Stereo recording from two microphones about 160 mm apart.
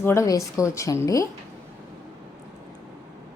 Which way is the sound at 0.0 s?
15° left (ahead or behind).